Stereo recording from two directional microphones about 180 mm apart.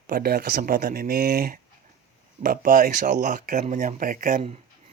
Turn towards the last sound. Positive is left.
turn(degrees=-45)  # may be behind; listen again after turning